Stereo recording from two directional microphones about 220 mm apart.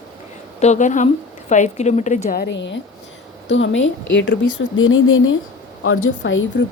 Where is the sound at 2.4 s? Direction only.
50° left (ahead or behind).